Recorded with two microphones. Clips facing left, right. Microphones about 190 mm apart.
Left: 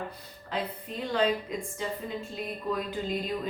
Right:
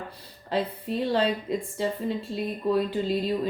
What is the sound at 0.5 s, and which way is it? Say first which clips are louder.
Speech: right 6 dB; 35° right (ahead or behind).